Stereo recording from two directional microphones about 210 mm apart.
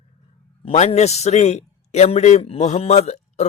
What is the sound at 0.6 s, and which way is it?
A man's voice, 30° left (ahead or behind).